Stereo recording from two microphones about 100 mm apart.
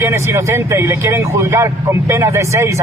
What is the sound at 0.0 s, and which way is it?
Speech, 25° right (ahead or behind).